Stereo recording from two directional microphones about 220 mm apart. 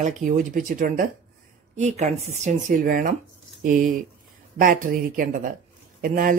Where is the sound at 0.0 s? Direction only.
35° right (ahead or behind).